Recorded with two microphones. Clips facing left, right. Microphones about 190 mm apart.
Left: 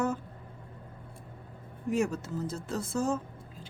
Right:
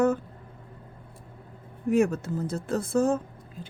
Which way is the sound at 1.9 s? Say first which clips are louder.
Right 6 dB; 55° right (ahead or behind).